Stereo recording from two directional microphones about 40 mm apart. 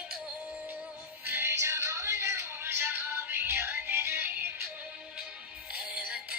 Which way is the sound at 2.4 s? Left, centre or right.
Right.